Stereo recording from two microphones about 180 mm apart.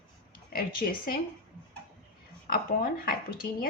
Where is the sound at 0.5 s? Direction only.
55° left (ahead or behind).